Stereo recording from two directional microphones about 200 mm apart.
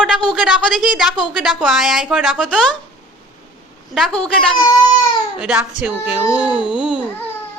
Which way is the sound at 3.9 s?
5° left (ahead or behind).